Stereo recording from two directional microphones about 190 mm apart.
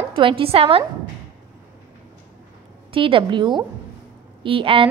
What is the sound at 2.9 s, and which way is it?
A woman's voice, 25° right (ahead or behind).